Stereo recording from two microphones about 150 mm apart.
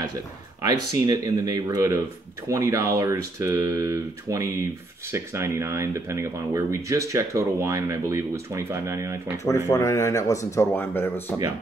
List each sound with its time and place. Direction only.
0.7 s speech: 25° right (ahead or behind)
9.4 s speech: 20° left (ahead or behind)